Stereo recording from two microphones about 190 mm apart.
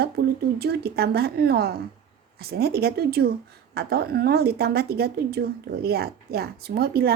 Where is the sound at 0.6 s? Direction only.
55° right (ahead or behind).